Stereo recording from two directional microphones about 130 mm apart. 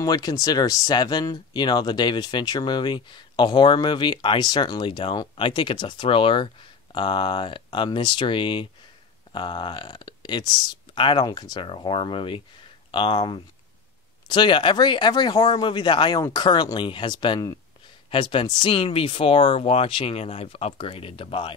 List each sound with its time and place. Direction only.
0.0 s speech: 30° left (ahead or behind)